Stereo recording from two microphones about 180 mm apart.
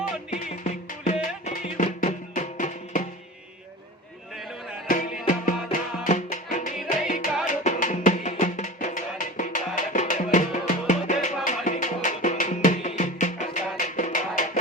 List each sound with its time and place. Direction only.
0.3 s music: 40° left (ahead or behind)
4.9 s music: 45° left (ahead or behind)